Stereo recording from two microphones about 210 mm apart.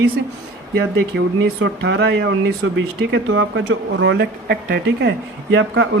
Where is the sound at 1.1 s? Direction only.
55° right (ahead or behind).